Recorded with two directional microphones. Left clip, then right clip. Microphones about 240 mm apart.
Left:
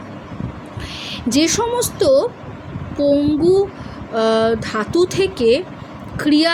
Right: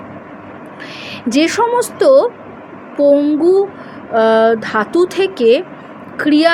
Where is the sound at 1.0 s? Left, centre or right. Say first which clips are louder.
Right 3 dB; centre.